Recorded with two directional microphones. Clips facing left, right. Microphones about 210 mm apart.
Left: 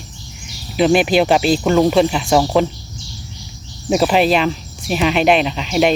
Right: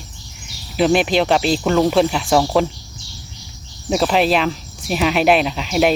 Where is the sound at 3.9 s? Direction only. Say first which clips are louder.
Left 2 dB; 5° left (ahead or behind).